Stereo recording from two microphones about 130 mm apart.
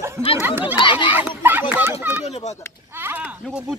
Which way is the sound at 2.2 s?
60° left (ahead or behind).